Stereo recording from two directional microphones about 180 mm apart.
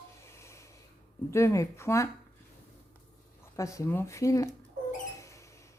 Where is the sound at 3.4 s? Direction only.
15° left (ahead or behind).